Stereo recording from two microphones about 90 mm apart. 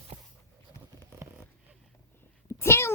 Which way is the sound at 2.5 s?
30° left (ahead or behind).